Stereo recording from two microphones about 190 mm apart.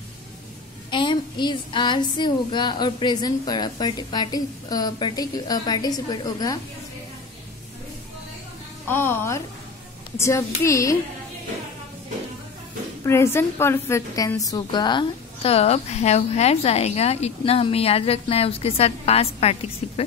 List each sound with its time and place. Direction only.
0.8 s speech: 25° left (ahead or behind)
8.8 s speech: 10° left (ahead or behind)
13.0 s a woman's voice: 15° left (ahead or behind); by 20.0 s 30° left (ahead or behind)